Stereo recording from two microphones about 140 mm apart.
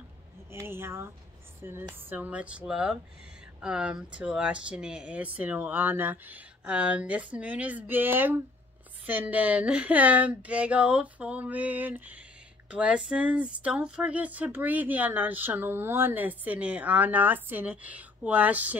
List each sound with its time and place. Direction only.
0.7 s speech: 15° right (ahead or behind)